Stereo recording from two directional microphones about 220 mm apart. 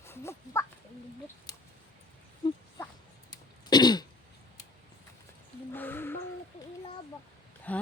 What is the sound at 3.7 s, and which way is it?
Throat clearing, 20° left (ahead or behind).